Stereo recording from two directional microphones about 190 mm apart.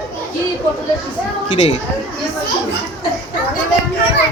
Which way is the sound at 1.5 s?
30° left (ahead or behind).